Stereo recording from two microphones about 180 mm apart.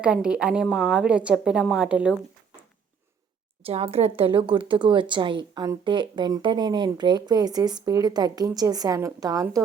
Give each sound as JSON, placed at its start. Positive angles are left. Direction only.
{"t": 0.0, "sound": "a woman's voice", "side_deg": -5}
{"t": 3.7, "sound": "speech", "side_deg": -35}